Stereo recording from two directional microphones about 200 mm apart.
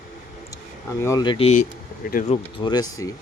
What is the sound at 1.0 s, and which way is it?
Speech, 20° left (ahead or behind).